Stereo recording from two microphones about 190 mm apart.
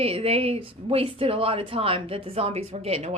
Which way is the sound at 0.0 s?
30° right (ahead or behind).